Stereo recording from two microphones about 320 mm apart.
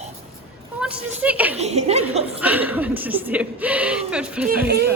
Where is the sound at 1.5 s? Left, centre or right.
Centre.